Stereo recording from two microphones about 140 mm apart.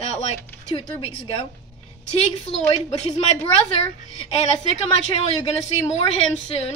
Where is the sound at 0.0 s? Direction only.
50° left (ahead or behind).